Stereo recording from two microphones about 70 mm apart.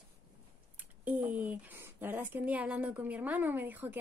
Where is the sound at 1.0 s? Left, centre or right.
Right.